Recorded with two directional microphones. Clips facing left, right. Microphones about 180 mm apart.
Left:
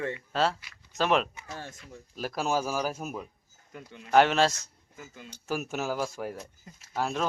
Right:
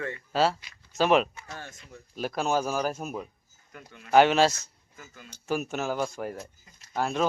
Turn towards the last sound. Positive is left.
turn(degrees=5)  # may be behind; listen again after turning